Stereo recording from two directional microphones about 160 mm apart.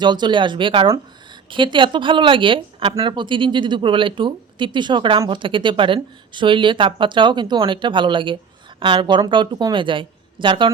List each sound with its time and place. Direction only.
0.0 s speech: 30° right (ahead or behind)